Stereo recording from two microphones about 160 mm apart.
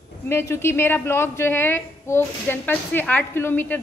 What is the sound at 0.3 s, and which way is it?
A woman's voice, 15° left (ahead or behind).